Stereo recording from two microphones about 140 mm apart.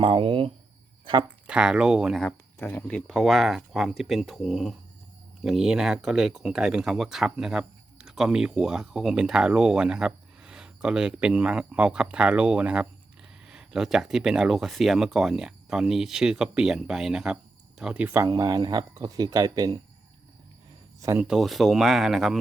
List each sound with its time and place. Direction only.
0.0 s speech: 40° right (ahead or behind)
1.5 s speech: 5° right (ahead or behind)
2.2 s speech: 15° left (ahead or behind); by 18.0 s 5° right (ahead or behind)
18.0 s speech: 20° right (ahead or behind)
21.0 s speech: 20° right (ahead or behind)
21.2 s speech: centre (ahead or behind)